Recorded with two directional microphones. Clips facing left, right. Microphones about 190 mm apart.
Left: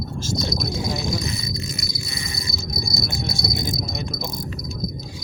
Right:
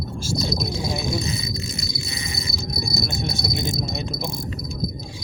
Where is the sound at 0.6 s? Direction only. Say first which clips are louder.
Even; 25° right (ahead or behind).